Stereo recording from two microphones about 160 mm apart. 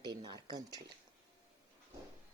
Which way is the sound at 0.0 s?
25° right (ahead or behind).